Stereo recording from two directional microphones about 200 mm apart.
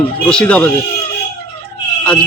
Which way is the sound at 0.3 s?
5° left (ahead or behind).